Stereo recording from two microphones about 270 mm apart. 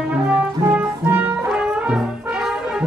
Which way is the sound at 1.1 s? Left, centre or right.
Centre.